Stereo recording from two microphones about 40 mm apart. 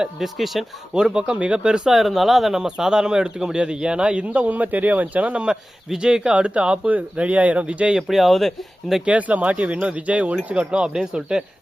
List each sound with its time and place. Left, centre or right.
0.2 s speech: centre
0.9 s a man's voice: right
1.9 s speech: centre
2.6 s a man's voice: centre
4.3 s a man's voice: right
5.9 s a man's voice: centre
8.0 s speech: centre
9.0 s a man's voice: right; by 11.4 s centre